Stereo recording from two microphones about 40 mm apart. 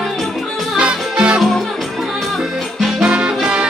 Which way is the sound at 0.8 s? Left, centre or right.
Right.